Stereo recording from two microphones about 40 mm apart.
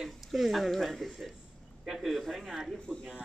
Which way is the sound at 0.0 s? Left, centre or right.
Centre.